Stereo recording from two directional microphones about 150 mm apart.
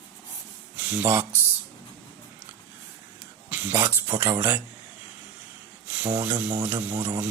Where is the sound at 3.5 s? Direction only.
15° right (ahead or behind).